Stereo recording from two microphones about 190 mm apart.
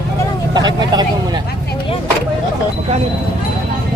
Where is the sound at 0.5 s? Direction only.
20° right (ahead or behind).